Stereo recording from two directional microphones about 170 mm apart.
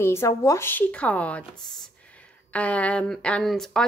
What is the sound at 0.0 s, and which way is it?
A woman's voice, 15° left (ahead or behind).